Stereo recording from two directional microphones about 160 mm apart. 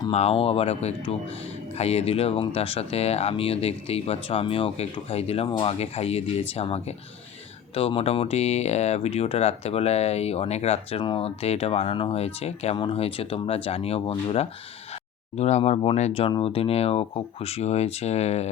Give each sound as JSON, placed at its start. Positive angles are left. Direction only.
{"t": 0.1, "sound": "speech", "side_deg": 40}